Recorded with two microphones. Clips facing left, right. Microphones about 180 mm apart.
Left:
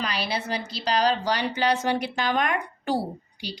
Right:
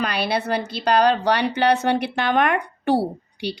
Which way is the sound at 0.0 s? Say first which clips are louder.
Right 6 dB; 60° right (ahead or behind).